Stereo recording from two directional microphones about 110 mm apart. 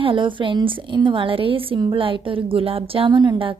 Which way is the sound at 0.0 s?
50° right (ahead or behind).